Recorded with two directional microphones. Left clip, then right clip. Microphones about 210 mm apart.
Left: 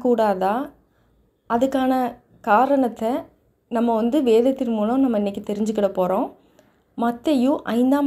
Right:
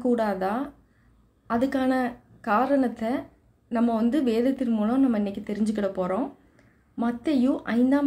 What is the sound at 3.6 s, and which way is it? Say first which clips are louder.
A woman's voice: left 5 dB; 15° left (ahead or behind).